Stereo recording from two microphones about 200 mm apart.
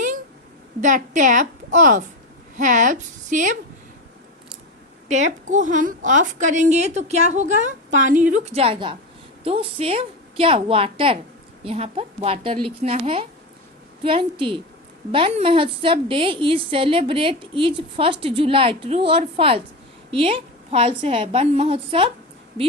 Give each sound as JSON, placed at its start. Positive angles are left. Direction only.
{"t": 0.8, "sound": "a woman's voice", "side_deg": -40}
{"t": 5.0, "sound": "a woman's voice", "side_deg": -35}